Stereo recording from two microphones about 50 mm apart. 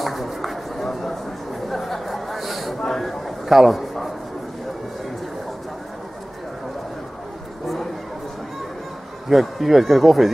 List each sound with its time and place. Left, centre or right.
0.0 s a sound: centre
7.6 s chatter: centre
9.3 s speech: centre